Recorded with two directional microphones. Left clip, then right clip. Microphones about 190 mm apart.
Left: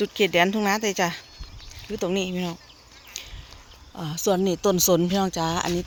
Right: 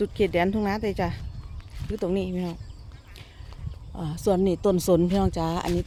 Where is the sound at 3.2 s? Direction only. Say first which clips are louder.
Left 11 dB; 15° right (ahead or behind).